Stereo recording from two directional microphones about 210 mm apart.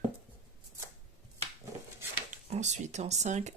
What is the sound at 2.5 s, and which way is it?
Speech, 35° right (ahead or behind).